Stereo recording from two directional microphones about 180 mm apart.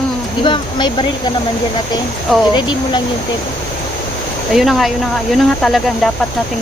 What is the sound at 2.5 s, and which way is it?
Speech, 25° left (ahead or behind).